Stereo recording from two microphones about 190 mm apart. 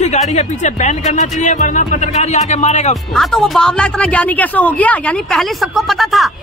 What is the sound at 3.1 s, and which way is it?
A woman's voice, centre (ahead or behind).